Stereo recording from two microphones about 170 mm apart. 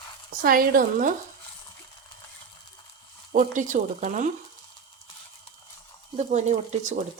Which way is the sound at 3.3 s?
50° right (ahead or behind).